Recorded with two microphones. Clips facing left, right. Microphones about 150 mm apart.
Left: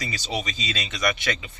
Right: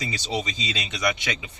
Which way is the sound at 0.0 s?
20° right (ahead or behind).